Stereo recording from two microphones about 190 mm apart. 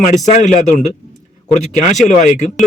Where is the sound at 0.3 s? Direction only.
40° left (ahead or behind).